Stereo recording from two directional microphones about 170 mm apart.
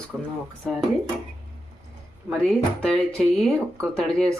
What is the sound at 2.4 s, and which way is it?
Speech, 5° left (ahead or behind).